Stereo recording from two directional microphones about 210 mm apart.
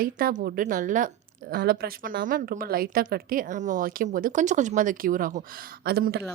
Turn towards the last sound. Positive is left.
turn(degrees=-50)  # may be behind; listen again after turning